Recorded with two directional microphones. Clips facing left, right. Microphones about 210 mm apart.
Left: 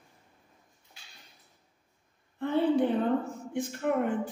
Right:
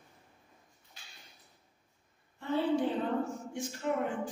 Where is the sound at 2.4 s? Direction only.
55° left (ahead or behind).